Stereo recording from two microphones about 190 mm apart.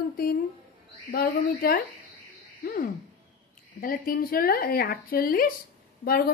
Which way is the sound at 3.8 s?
50° left (ahead or behind).